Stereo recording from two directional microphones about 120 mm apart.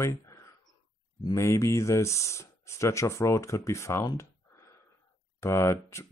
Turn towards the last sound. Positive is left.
turn(degrees=25)  # may be behind; listen again after turning